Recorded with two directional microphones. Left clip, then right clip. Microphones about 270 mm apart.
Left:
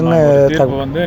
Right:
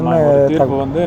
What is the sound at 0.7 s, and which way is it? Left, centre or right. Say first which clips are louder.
Speech: right 1 dB; left.